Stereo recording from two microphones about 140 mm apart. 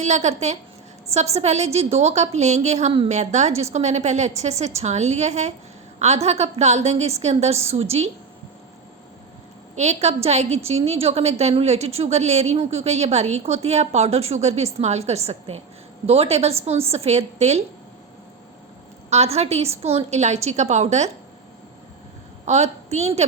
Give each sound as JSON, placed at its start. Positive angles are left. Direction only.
{"t": 0.0, "sound": "a woman's voice", "side_deg": -55}
{"t": 9.7, "sound": "a woman's voice", "side_deg": -50}
{"t": 19.1, "sound": "a woman's voice", "side_deg": -50}
{"t": 22.4, "sound": "a woman's voice", "side_deg": -50}